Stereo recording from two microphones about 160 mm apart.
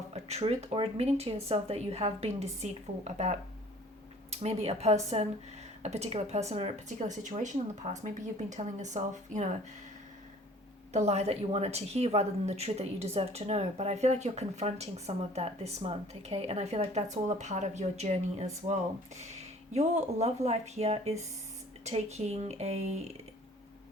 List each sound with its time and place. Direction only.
0.1 s a woman's voice: 40° right (ahead or behind)
10.9 s a woman's voice: 40° right (ahead or behind)